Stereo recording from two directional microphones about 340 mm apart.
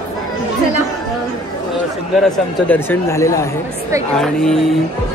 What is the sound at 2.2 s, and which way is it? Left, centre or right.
Speech, centre.